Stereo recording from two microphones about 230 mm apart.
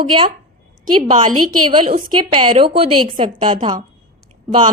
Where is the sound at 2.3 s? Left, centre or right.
Right.